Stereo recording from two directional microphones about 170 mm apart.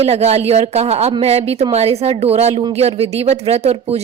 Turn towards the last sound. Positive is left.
turn(degrees=-40)  # may be behind; listen again after turning